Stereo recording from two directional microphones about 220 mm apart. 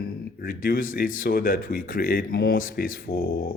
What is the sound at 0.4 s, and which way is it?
Speech, 40° left (ahead or behind).